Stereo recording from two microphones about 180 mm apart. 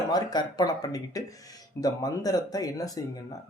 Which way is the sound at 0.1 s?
20° left (ahead or behind).